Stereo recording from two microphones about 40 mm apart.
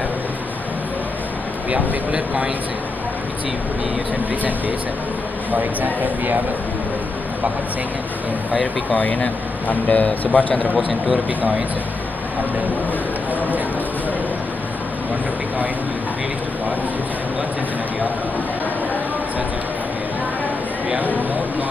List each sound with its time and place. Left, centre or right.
1.7 s speech: right
5.5 s speech: right
8.9 s speech: left